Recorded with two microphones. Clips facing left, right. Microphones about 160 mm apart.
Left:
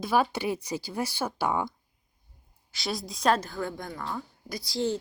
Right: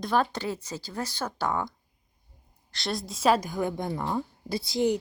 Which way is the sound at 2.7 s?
Centre (ahead or behind).